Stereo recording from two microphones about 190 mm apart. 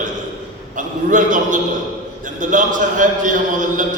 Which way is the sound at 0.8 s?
40° right (ahead or behind).